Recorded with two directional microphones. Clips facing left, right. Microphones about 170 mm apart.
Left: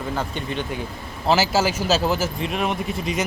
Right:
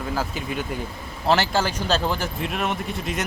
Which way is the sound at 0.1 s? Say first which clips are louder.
Even; 5° right (ahead or behind).